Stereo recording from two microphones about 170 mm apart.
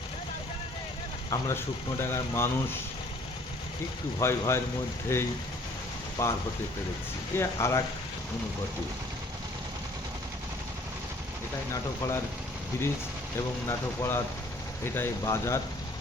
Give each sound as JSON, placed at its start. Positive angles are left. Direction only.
{"t": 1.3, "sound": "speech", "side_deg": 15}
{"t": 4.2, "sound": "speech", "side_deg": 15}
{"t": 7.3, "sound": "speech", "side_deg": 15}
{"t": 11.7, "sound": "speech", "side_deg": 15}
{"t": 13.7, "sound": "speech", "side_deg": 15}